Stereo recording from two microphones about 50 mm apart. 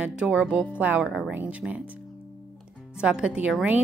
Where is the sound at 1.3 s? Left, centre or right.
Right.